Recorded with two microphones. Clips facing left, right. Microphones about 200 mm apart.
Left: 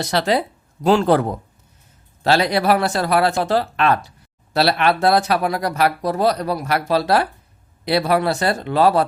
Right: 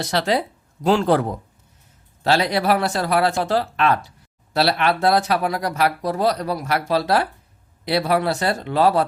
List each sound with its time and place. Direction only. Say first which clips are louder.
1.0 s speech: left 2 dB; 55° left (ahead or behind)
2.2 s speech: left 2 dB; 65° left (ahead or behind)